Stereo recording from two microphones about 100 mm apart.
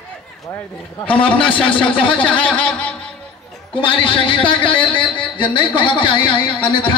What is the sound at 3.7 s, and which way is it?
A man's voice, 60° left (ahead or behind).